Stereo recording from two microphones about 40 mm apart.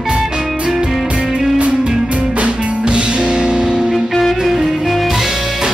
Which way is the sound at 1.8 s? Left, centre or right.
Right.